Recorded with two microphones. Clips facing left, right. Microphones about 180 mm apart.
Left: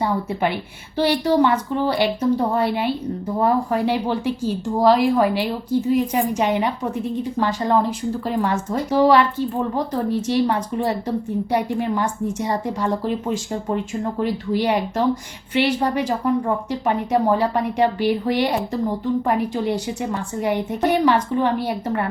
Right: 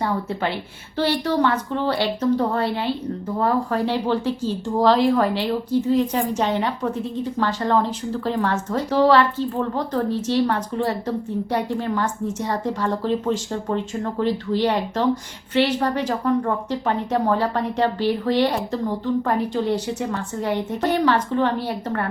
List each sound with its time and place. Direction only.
0.0 s a woman's voice: 15° left (ahead or behind)